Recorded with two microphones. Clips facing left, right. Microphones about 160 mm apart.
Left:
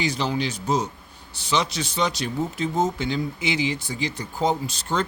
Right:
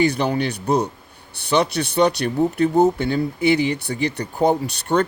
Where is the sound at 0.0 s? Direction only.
60° right (ahead or behind).